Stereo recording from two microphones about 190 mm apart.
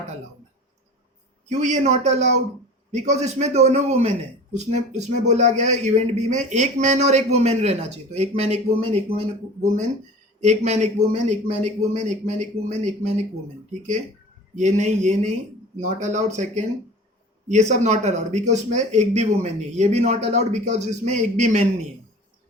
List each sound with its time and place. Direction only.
1.5 s a man's voice: 35° right (ahead or behind)
14.5 s a man's voice: 40° right (ahead or behind)